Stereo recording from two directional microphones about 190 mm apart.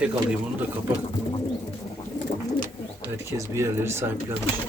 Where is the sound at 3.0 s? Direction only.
15° right (ahead or behind).